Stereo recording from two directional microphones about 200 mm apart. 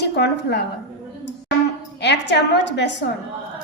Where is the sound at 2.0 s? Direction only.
60° left (ahead or behind).